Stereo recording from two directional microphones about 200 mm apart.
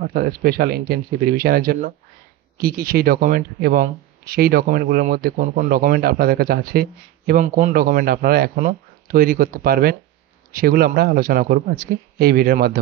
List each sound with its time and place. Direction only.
0.1 s speech: 45° right (ahead or behind)